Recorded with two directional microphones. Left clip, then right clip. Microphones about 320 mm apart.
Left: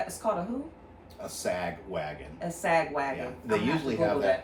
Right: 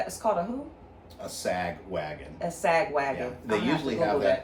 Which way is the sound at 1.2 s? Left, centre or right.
Centre.